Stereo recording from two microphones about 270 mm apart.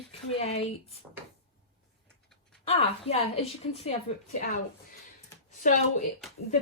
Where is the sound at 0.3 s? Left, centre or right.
Left.